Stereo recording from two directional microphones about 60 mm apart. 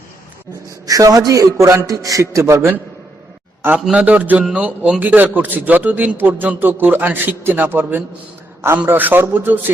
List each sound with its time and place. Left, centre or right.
0.9 s a man's voice: right
1.9 s a man's voice: right
3.9 s a man's voice: right